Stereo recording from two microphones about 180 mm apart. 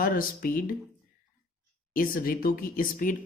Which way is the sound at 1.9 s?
50° left (ahead or behind).